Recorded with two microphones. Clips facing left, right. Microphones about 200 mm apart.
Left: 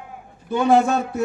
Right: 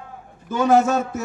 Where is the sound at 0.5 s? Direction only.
45° right (ahead or behind).